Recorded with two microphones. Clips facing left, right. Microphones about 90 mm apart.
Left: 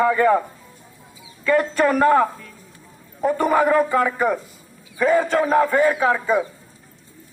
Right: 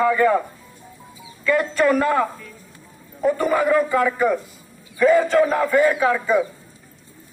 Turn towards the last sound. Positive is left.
turn(degrees=25)  # may be behind; listen again after turning